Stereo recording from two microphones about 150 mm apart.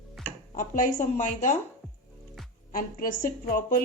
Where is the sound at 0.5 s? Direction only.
55° left (ahead or behind).